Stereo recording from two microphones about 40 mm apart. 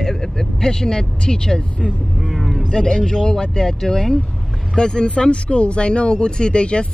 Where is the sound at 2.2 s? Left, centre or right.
Centre.